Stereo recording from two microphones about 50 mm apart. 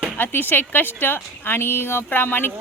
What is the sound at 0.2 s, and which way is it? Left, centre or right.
A woman's voice, left.